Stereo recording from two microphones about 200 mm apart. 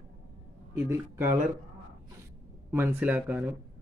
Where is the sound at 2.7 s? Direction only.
10° right (ahead or behind).